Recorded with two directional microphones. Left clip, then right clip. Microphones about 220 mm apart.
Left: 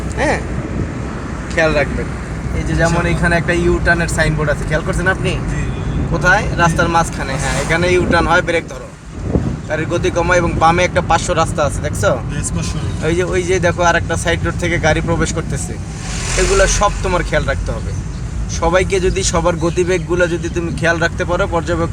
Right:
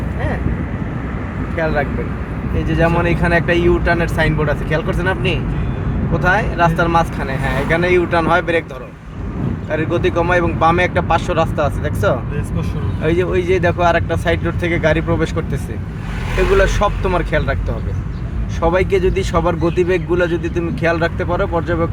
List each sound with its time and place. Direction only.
1.5 s speech: 20° left (ahead or behind)
2.7 s a man's voice: 10° right (ahead or behind)
9.6 s a man's voice: 5° right (ahead or behind)
16.6 s a man's voice: 5° right (ahead or behind)
18.6 s a man's voice: centre (ahead or behind)